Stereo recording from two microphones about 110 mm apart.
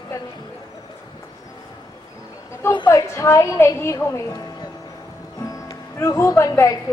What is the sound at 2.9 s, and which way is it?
Speech, 25° left (ahead or behind).